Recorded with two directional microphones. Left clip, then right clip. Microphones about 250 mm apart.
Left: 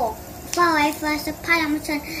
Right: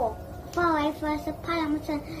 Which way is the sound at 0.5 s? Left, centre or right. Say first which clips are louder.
Left 7 dB; left.